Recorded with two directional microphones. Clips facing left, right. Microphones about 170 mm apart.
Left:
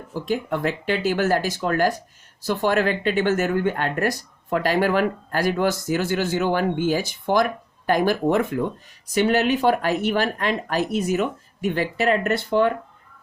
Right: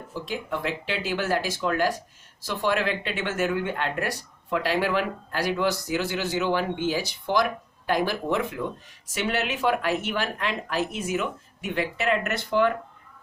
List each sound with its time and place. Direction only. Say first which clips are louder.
0.1 s speech: left 6 dB; 45° left (ahead or behind); by 12.7 s 30° left (ahead or behind)